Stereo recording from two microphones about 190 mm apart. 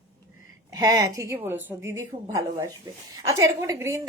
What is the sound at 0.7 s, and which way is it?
A woman's voice, 15° right (ahead or behind).